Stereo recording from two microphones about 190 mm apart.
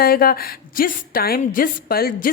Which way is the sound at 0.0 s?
50° left (ahead or behind).